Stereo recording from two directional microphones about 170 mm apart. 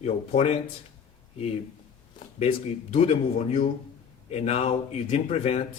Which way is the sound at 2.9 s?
35° left (ahead or behind).